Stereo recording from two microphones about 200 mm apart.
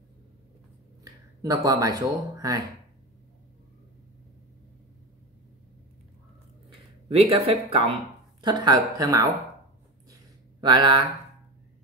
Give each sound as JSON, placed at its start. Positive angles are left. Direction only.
{"t": 1.0, "sound": "speech", "side_deg": -15}
{"t": 7.2, "sound": "speech", "side_deg": -30}
{"t": 10.1, "sound": "a sound", "side_deg": -20}